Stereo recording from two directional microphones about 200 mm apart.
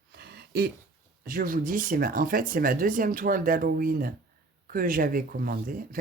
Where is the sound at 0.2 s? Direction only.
55° right (ahead or behind).